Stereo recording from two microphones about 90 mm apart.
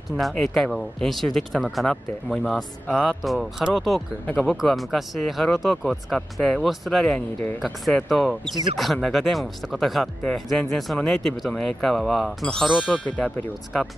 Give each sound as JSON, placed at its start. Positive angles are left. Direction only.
{"t": 0.2, "sound": "speech", "side_deg": 0}